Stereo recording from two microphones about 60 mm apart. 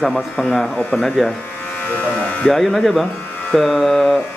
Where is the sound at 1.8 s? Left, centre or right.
Left.